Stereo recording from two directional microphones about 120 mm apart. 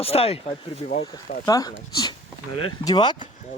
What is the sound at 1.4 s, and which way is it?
Speech, 30° left (ahead or behind).